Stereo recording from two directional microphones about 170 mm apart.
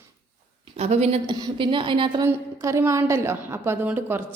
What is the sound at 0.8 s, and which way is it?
A woman's voice, 40° right (ahead or behind).